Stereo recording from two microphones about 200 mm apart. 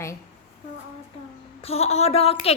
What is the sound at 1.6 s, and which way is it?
Speech, 30° left (ahead or behind).